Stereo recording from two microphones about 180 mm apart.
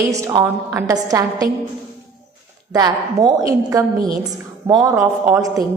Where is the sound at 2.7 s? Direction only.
20° right (ahead or behind).